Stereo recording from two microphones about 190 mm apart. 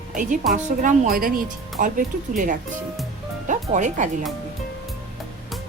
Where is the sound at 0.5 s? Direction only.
45° right (ahead or behind).